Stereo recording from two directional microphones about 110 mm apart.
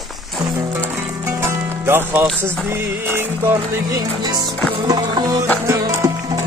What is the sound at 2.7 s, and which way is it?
Speech, 20° right (ahead or behind).